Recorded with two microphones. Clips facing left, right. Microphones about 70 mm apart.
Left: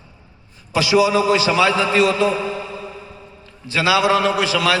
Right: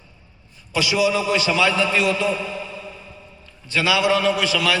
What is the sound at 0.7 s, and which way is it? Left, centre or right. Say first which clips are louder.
A man's voice: left 4 dB; left.